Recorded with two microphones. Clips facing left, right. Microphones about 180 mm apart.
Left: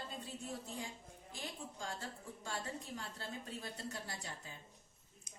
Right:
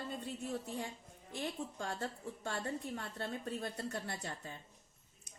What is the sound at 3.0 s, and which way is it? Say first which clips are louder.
Speech: right 5 dB; 60° right (ahead or behind).